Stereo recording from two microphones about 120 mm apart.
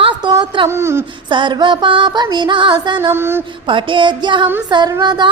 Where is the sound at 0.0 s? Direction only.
40° right (ahead or behind).